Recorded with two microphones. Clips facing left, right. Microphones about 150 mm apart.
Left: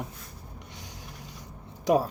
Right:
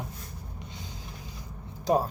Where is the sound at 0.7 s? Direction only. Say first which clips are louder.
Right 2 dB; 70° left (ahead or behind).